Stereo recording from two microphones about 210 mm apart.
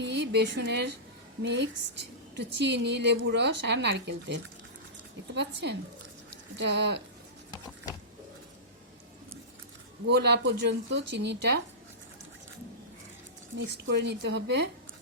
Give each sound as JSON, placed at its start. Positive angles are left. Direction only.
{"t": 0.0, "sound": "a woman's voice", "side_deg": -55}
{"t": 10.1, "sound": "speech", "side_deg": -50}
{"t": 13.6, "sound": "a woman's voice", "side_deg": -60}